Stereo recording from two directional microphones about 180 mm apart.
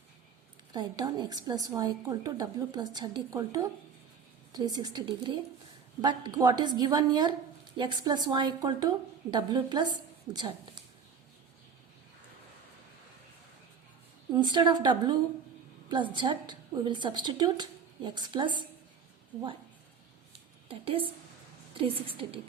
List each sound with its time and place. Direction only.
0.7 s a woman's voice: 20° right (ahead or behind)
14.3 s a woman's voice: 25° right (ahead or behind)
20.3 s a sound: 30° right (ahead or behind)
21.8 s a woman's voice: 30° right (ahead or behind)